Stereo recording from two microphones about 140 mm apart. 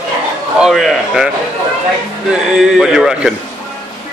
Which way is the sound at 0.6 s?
Centre (ahead or behind).